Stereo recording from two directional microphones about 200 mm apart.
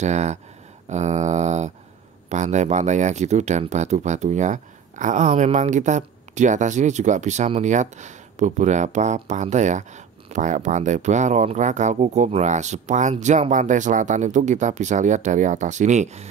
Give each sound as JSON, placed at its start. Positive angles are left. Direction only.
{"t": 0.0, "sound": "speech", "side_deg": -35}